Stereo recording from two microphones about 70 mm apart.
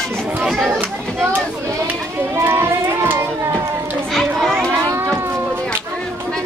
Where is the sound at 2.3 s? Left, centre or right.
Right.